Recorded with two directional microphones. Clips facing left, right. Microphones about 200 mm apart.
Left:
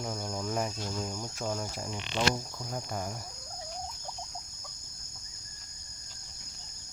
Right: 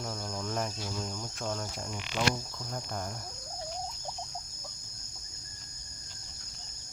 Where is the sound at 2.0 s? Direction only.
25° left (ahead or behind).